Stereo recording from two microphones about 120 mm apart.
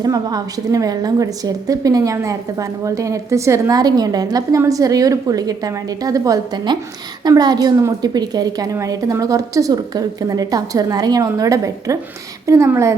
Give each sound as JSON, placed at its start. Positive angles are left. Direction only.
{"t": 0.0, "sound": "a woman's voice", "side_deg": -35}